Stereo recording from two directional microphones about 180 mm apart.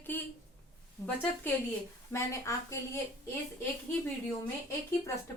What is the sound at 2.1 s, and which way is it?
Speech, 15° left (ahead or behind).